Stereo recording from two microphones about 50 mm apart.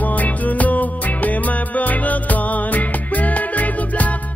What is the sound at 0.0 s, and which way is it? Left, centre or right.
Music, left.